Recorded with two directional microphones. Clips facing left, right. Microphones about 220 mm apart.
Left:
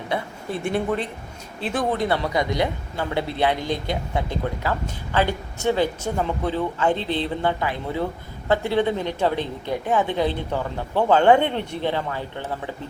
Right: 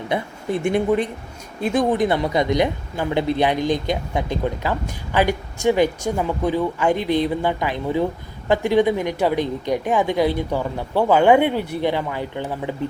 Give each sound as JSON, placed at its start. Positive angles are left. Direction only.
{"t": 0.1, "sound": "speech", "side_deg": -15}